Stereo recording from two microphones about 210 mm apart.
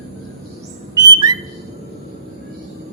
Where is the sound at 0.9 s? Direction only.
20° right (ahead or behind).